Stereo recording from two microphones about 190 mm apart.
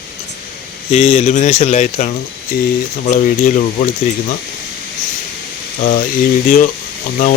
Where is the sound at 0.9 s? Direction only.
35° left (ahead or behind).